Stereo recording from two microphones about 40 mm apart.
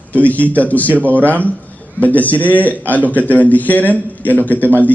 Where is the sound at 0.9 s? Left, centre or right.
Right.